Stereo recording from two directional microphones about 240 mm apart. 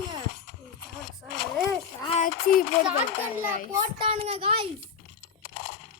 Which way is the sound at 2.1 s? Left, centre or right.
Left.